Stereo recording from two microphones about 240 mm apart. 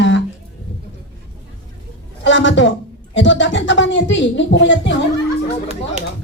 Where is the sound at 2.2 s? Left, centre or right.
Left.